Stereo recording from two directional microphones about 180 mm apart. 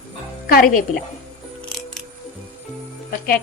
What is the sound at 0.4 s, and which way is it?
Speech, 50° left (ahead or behind).